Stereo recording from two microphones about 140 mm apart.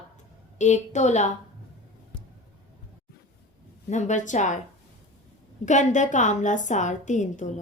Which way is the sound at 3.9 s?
60° left (ahead or behind).